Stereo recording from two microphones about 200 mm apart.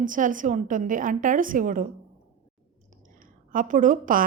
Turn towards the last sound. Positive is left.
turn(degrees=-40)  # may be behind; listen again after turning